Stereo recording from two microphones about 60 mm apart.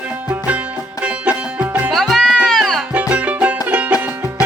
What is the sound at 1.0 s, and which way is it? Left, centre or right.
Music, right.